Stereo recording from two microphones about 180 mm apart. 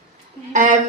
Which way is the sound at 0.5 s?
45° right (ahead or behind).